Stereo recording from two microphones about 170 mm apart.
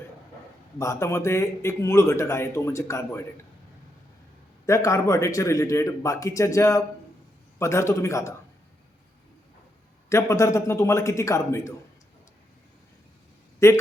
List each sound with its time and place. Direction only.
0.8 s a man's voice: 15° left (ahead or behind)
4.6 s a man's voice: 20° left (ahead or behind)
10.1 s a man's voice: 15° left (ahead or behind)
13.6 s a man's voice: 15° left (ahead or behind)